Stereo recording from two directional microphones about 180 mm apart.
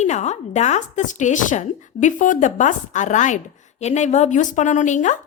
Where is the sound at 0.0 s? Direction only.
40° left (ahead or behind).